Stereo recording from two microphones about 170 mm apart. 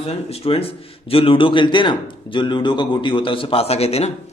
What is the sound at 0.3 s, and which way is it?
A man's voice, 35° left (ahead or behind).